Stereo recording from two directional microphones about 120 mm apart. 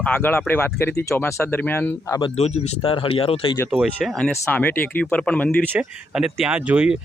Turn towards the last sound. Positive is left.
turn(degrees=-10)  # may be behind; listen again after turning